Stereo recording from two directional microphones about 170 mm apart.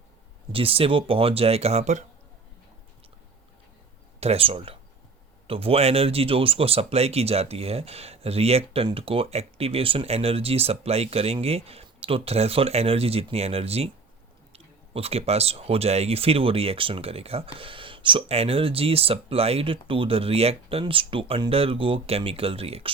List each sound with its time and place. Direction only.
0.5 s speech: 35° right (ahead or behind)
4.2 s speech: 35° right (ahead or behind)